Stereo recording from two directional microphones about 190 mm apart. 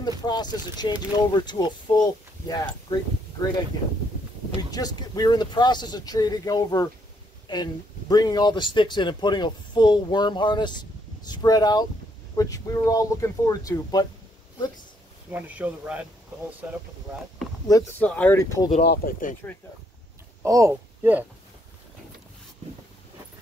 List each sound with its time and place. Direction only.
0.2 s speech: 20° left (ahead or behind)
15.3 s speech: 10° right (ahead or behind)
17.6 s speech: 20° left (ahead or behind)
18.0 s speech: 5° left (ahead or behind)
18.9 s speech: 45° left (ahead or behind)
20.4 s speech: 15° right (ahead or behind)